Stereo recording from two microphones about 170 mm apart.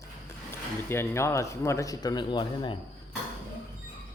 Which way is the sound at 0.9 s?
15° left (ahead or behind).